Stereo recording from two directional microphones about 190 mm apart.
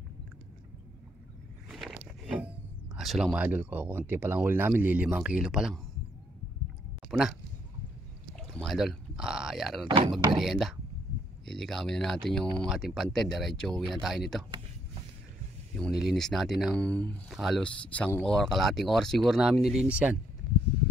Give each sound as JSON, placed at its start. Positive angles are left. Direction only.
{"t": 1.7, "sound": "speech", "side_deg": 0}
{"t": 7.1, "sound": "speech", "side_deg": 0}
{"t": 8.4, "sound": "speech", "side_deg": 0}
{"t": 9.8, "sound": "speech", "side_deg": -25}
{"t": 10.3, "sound": "speech", "side_deg": 0}
{"t": 15.7, "sound": "speech", "side_deg": 0}